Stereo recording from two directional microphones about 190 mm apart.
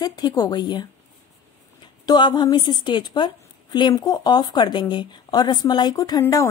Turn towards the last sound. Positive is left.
turn(degrees=20)  # may be behind; listen again after turning